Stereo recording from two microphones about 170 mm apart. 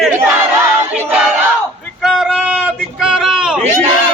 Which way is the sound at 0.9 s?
10° right (ahead or behind).